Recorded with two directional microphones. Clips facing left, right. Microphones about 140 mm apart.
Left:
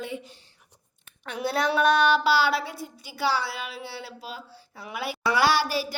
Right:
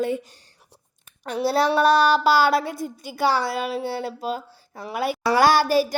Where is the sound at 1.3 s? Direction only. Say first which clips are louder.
Right 5 dB; 35° right (ahead or behind).